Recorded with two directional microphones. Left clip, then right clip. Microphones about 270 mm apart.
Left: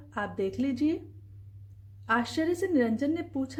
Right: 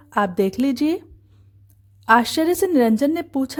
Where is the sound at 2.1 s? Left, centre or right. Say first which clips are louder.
Right 12 dB; right.